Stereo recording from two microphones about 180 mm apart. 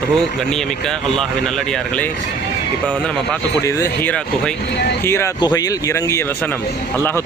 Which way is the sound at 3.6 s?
15° left (ahead or behind).